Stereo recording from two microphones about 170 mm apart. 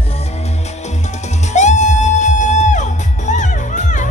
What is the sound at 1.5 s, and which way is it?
Music, 45° left (ahead or behind).